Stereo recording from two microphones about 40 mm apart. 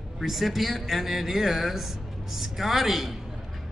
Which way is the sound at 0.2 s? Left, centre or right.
Centre.